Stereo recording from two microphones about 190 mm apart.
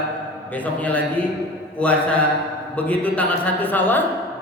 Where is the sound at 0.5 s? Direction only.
10° left (ahead or behind).